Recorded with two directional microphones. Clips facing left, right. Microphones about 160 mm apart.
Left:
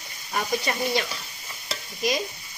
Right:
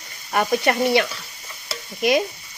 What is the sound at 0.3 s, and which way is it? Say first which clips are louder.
Speech: right 7 dB; 65° right (ahead or behind).